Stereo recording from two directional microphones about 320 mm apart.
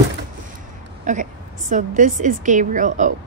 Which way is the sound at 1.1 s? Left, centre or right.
Right.